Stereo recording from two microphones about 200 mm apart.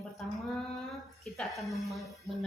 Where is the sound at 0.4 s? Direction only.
Centre (ahead or behind).